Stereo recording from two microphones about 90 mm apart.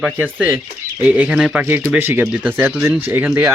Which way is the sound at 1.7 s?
25° right (ahead or behind).